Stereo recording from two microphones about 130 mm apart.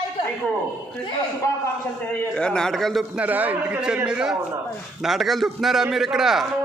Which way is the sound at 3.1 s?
10° right (ahead or behind).